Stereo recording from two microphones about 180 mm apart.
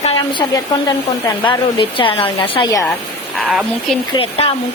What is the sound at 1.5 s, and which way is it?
Speech, 30° left (ahead or behind).